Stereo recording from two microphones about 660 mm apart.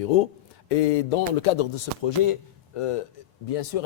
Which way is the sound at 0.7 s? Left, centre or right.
Left.